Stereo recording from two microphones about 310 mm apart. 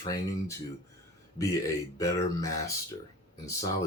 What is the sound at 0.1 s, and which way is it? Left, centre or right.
Speech, centre.